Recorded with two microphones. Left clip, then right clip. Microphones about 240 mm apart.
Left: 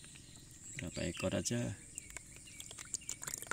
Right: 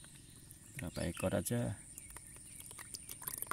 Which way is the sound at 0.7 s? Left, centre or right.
Right.